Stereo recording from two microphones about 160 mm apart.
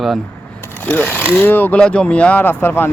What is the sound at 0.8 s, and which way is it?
Speech, 10° left (ahead or behind).